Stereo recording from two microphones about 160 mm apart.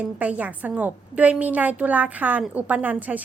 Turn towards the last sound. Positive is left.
turn(degrees=-10)  # may be behind; listen again after turning